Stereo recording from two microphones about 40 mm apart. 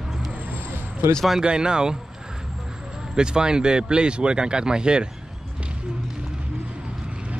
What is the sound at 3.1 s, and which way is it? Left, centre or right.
Speech, right.